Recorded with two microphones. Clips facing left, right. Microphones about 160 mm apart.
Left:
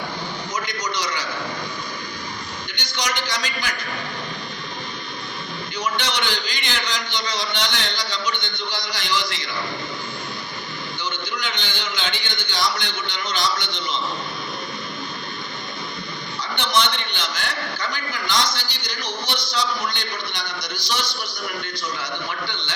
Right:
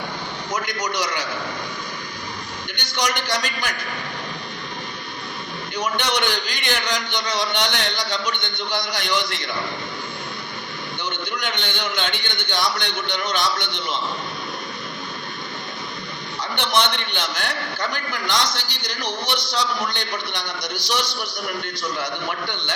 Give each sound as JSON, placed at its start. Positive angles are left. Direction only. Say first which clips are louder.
{"t": 0.5, "sound": "a man's voice", "louder": "right 3 dB", "side_deg": -65}
{"t": 2.7, "sound": "a man's voice", "louder": "right 3 dB", "side_deg": -55}
{"t": 5.7, "sound": "a man's voice", "louder": "right 2 dB", "side_deg": -60}
{"t": 11.3, "sound": "a man's voice", "louder": "right 2 dB", "side_deg": -60}
{"t": 16.6, "sound": "a man's voice", "louder": "right 1 dB", "side_deg": -55}